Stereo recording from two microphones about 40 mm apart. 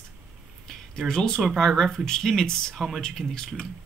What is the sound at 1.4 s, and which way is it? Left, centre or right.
Speech, centre.